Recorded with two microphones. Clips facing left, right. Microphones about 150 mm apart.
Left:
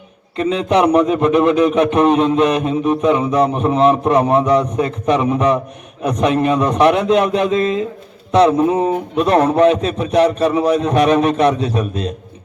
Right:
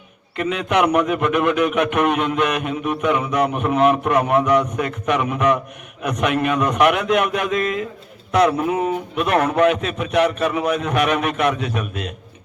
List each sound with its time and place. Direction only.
0.3 s a man's voice: 30° left (ahead or behind)